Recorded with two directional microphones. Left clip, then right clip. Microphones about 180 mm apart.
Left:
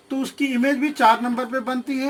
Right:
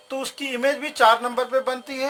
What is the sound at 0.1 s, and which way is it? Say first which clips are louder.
Speech: left 3 dB; 40° right (ahead or behind).